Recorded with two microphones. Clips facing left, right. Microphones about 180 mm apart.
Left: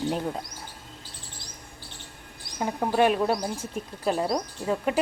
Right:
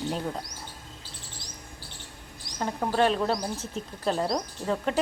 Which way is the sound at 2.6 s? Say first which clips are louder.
Left 2 dB; 10° left (ahead or behind).